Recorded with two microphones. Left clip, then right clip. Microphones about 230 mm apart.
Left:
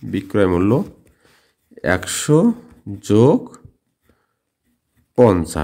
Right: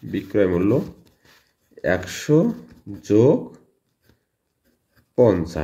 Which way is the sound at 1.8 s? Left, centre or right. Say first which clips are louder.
Left 3 dB; left.